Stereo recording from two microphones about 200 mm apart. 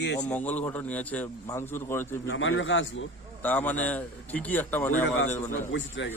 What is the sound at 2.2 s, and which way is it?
Speech, 75° left (ahead or behind).